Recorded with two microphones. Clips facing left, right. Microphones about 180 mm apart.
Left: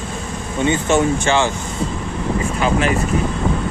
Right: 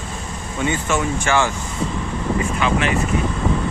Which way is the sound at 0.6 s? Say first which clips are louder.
Left 5 dB; 25° left (ahead or behind).